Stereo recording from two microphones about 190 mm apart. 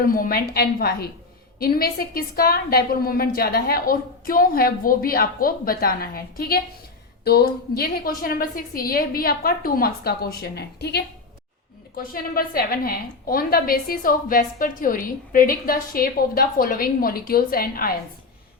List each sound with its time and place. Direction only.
0.0 s a woman's voice: 50° left (ahead or behind)